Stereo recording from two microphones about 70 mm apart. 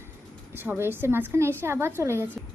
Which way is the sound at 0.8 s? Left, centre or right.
Right.